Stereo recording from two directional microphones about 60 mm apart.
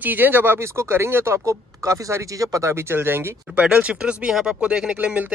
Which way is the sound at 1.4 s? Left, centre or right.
Right.